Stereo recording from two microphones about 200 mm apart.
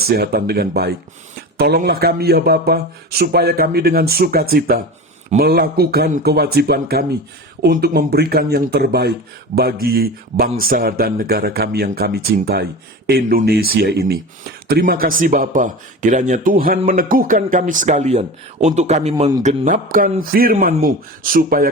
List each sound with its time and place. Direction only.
0.1 s speech: 50° right (ahead or behind)